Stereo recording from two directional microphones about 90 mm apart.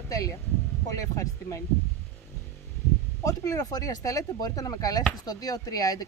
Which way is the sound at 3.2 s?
40° left (ahead or behind).